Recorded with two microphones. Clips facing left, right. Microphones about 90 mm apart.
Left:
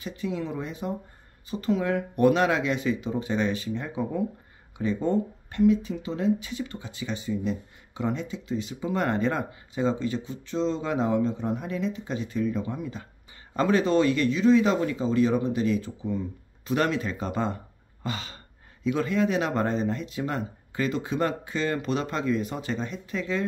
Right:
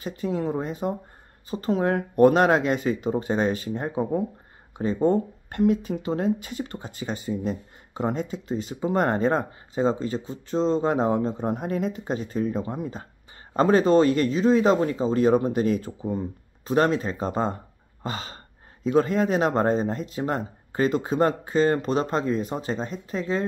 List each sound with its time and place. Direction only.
0.0 s speech: 40° right (ahead or behind)